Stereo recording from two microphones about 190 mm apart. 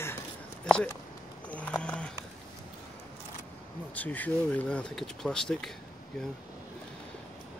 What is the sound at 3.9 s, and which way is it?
Speech, 10° left (ahead or behind).